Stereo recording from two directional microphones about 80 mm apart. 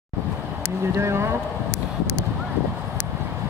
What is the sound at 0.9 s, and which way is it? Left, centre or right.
Speech, right.